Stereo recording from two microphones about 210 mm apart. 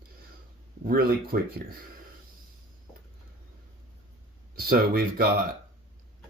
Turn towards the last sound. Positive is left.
turn(degrees=-45)  # may be behind; listen again after turning